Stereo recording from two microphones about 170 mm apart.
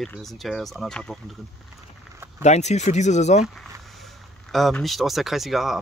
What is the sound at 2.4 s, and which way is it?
Speech, 40° left (ahead or behind).